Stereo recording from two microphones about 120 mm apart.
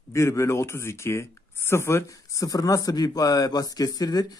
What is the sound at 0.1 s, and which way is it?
A man's voice, 25° left (ahead or behind).